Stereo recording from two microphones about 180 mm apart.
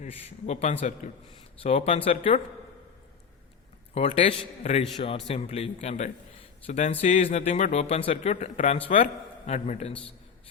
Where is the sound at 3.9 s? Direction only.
35° left (ahead or behind).